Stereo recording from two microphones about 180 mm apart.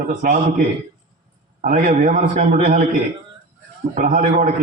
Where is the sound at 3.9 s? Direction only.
45° right (ahead or behind).